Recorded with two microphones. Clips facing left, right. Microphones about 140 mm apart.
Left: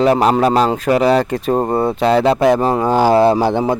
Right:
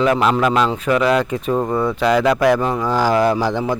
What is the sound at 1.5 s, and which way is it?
Speech, 45° left (ahead or behind).